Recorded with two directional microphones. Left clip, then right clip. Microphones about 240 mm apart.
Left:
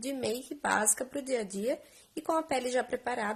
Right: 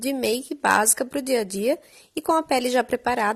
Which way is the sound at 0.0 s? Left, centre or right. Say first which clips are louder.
Right 10 dB; right.